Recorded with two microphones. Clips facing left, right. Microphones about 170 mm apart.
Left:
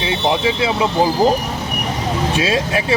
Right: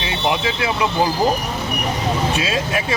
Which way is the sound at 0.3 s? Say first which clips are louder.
Left 3 dB; 25° left (ahead or behind).